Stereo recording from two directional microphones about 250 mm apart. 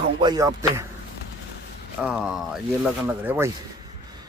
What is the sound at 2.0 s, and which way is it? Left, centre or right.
Speech, centre.